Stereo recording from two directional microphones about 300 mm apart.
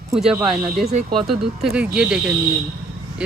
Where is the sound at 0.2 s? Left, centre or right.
Centre.